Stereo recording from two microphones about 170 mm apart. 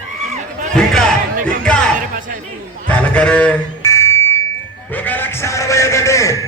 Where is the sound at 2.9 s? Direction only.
5° left (ahead or behind).